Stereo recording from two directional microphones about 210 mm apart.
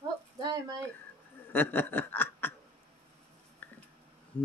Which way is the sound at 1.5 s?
10° left (ahead or behind).